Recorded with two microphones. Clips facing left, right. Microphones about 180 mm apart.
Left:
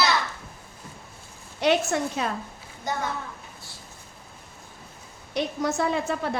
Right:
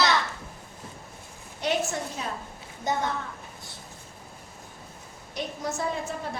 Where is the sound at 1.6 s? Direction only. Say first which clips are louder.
Left 5 dB; 80° left.